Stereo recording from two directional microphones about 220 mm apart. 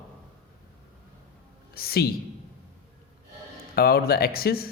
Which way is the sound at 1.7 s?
45° left (ahead or behind).